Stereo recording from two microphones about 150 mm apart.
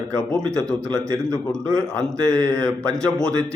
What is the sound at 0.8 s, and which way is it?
Speech, 20° right (ahead or behind).